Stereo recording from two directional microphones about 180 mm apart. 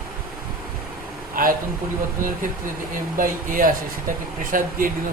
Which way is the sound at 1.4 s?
55° right (ahead or behind).